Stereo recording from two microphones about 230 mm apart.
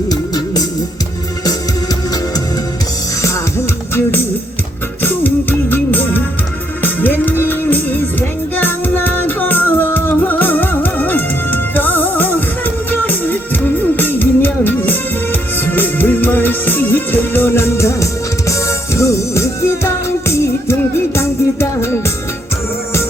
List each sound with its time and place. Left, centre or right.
0.1 s music: centre
3.2 s music: centre
5.0 s music: centre